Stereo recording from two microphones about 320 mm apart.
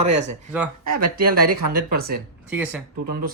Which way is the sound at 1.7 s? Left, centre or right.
Right.